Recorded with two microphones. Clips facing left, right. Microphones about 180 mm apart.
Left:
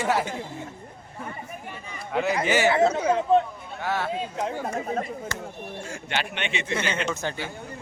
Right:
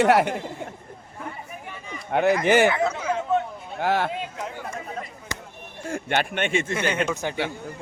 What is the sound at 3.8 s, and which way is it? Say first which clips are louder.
Speech: right 5 dB; 55° right (ahead or behind).